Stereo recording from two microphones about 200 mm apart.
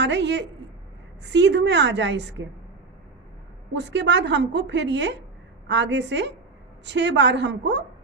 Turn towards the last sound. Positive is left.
turn(degrees=-60)  # may be behind; listen again after turning